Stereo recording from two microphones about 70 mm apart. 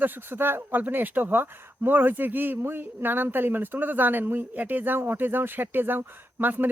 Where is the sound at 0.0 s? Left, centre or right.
Right.